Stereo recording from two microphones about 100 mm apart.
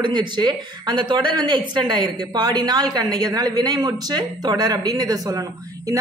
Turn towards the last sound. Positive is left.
turn(degrees=-40)  # may be behind; listen again after turning